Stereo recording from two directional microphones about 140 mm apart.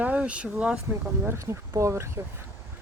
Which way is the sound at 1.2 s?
20° right (ahead or behind).